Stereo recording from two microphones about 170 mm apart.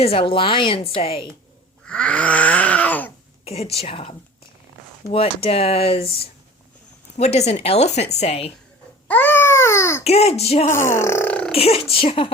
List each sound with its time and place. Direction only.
0.0 s a woman's voice: 35° left (ahead or behind)
1.9 s groan: 5° left (ahead or behind)
3.4 s a woman's voice: 35° left (ahead or behind)
5.1 s a woman's voice: 35° left (ahead or behind)
9.0 s babbling: 10° left (ahead or behind)
10.0 s a woman's voice: 40° left (ahead or behind)
10.7 s speech: 15° left (ahead or behind)
11.5 s a woman's voice: 35° left (ahead or behind)